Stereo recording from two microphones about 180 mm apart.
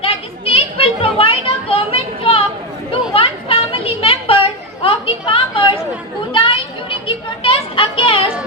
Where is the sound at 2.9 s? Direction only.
30° left (ahead or behind).